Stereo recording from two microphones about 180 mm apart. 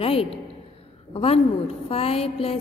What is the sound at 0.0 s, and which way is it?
A woman's voice, 30° left (ahead or behind).